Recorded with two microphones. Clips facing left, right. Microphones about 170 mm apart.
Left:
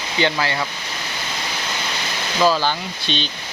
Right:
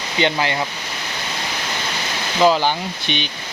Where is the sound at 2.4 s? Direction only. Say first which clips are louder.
Right 2 dB; 20° right (ahead or behind).